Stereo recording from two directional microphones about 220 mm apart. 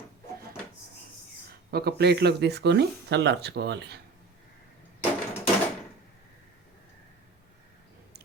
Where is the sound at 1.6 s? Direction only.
45° right (ahead or behind).